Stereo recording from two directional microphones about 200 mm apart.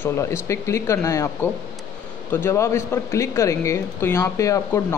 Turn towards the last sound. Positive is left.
turn(degrees=15)  # may be behind; listen again after turning